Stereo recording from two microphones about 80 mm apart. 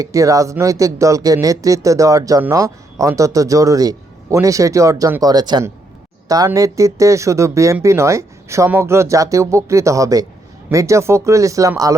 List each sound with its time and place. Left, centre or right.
0.0 s a man's voice: right
5.2 s speech: right
6.2 s speech: right